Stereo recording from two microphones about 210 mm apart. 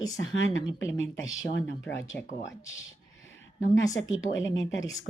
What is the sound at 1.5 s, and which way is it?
A woman's voice, 65° left (ahead or behind).